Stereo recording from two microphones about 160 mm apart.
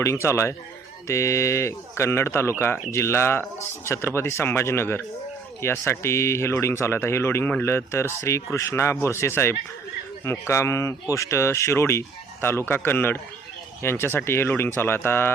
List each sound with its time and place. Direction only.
0.0 s speech: 20° left (ahead or behind)